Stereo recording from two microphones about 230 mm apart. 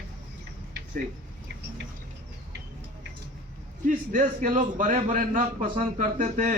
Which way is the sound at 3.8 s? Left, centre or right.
Right.